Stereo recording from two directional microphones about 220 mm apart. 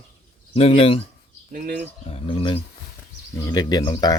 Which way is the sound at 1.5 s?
45° right (ahead or behind).